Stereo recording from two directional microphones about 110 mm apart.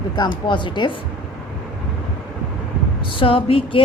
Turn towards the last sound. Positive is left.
turn(degrees=55)  # may be behind; listen again after turning